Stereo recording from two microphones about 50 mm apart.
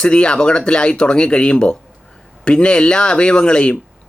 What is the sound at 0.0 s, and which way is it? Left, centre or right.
Speech, centre.